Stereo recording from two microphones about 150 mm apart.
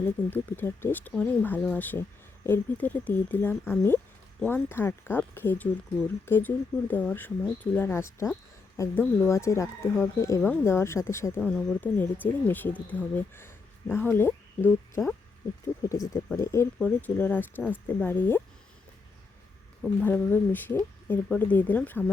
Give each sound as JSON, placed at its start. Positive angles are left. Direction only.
{"t": 0.0, "sound": "speech", "side_deg": 10}
{"t": 11.3, "sound": "speech", "side_deg": 5}
{"t": 20.0, "sound": "speech", "side_deg": 10}